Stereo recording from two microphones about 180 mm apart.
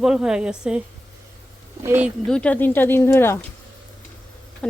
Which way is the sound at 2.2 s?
5° left (ahead or behind).